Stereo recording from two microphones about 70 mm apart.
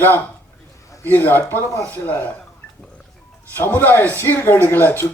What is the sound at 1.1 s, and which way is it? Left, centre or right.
A man's voice, left.